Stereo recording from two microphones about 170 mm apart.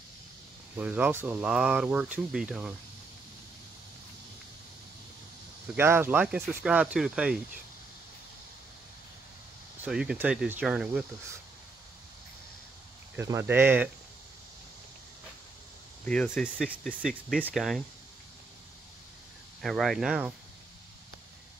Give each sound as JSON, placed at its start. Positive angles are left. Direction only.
{"t": 0.7, "sound": "speech", "side_deg": -10}
{"t": 5.8, "sound": "speech", "side_deg": -15}
{"t": 9.8, "sound": "speech", "side_deg": -5}
{"t": 13.1, "sound": "speech", "side_deg": -15}
{"t": 16.1, "sound": "speech", "side_deg": 5}
{"t": 16.6, "sound": "speech", "side_deg": -5}
{"t": 19.6, "sound": "speech", "side_deg": 0}